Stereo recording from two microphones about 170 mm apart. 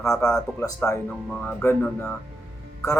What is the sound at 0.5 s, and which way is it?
Speech, 20° left (ahead or behind).